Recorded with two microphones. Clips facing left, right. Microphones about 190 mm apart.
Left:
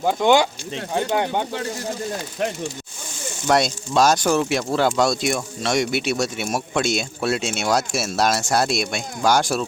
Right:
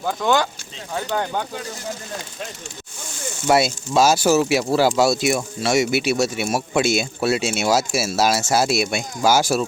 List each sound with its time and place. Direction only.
0.0 s speech: 25° left (ahead or behind)
3.4 s speech: 5° right (ahead or behind)